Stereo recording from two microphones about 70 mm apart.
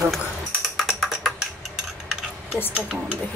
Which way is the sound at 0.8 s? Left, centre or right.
Centre.